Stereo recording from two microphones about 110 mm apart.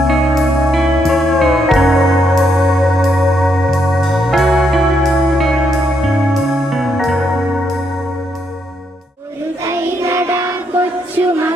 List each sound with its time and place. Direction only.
0.0 s music: centre (ahead or behind)
9.6 s child singing: 25° right (ahead or behind)